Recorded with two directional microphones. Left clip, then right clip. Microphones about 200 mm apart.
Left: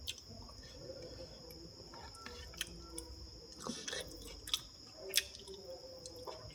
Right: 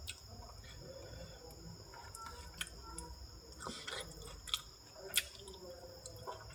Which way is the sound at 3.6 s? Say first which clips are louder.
Left 1 dB; 20° left (ahead or behind).